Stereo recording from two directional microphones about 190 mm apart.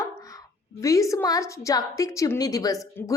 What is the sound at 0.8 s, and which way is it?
A woman's voice, 15° left (ahead or behind).